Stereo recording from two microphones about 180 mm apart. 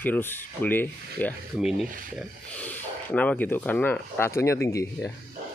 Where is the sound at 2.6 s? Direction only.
5° left (ahead or behind).